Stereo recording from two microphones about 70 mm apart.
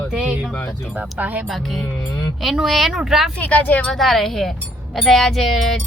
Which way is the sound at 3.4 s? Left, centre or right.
Left.